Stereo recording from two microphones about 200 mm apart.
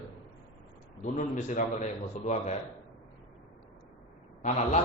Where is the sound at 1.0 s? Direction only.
40° left (ahead or behind).